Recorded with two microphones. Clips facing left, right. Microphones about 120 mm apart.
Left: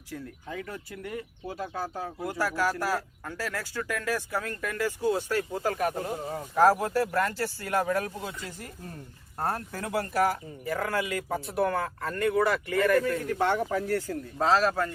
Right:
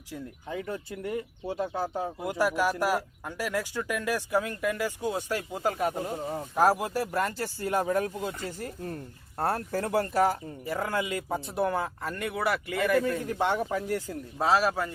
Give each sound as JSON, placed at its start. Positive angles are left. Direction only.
{"t": 0.1, "sound": "speech", "side_deg": -25}
{"t": 8.4, "sound": "speech", "side_deg": -35}